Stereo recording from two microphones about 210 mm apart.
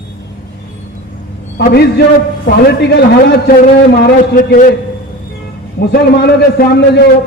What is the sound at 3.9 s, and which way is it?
Speech, 40° left (ahead or behind).